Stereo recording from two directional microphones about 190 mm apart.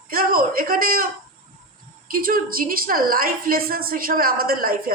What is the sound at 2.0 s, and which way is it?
A woman's voice, 50° right (ahead or behind).